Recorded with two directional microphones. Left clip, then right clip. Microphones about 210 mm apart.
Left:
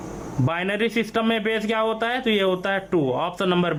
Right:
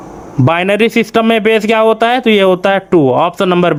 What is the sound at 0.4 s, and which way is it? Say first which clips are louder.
Speech: right 13 dB; 35° right (ahead or behind).